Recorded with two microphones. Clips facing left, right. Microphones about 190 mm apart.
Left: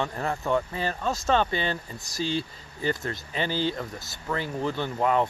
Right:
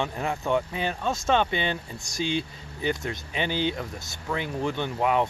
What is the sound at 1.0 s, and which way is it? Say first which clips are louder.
Speech: even; centre (ahead or behind).